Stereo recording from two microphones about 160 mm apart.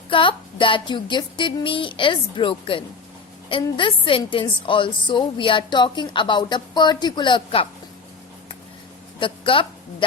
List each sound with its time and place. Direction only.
0.1 s a woman's voice: 30° left (ahead or behind)
9.1 s a woman's voice: 30° left (ahead or behind)